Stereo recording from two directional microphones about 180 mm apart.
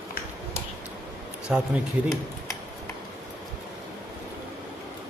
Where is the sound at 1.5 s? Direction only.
5° right (ahead or behind).